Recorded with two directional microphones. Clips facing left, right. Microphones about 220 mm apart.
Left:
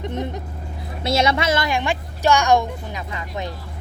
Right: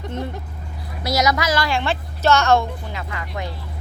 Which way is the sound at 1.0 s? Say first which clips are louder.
Left 1 dB; 25° left (ahead or behind).